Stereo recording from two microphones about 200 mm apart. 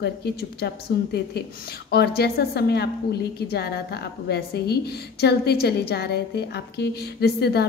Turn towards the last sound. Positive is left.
turn(degrees=55)  # may be behind; listen again after turning